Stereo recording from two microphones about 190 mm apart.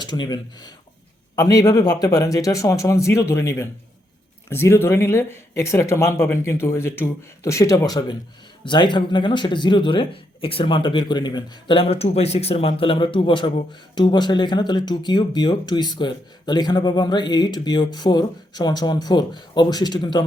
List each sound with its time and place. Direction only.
0.0 s speech: 20° left (ahead or behind)